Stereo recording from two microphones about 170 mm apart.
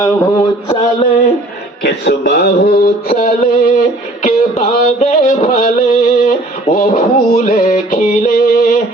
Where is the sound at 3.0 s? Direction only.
60° left (ahead or behind).